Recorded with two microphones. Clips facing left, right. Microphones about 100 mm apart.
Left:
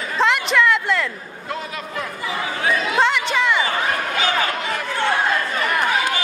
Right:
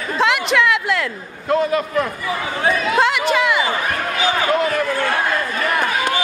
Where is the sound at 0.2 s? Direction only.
Centre (ahead or behind).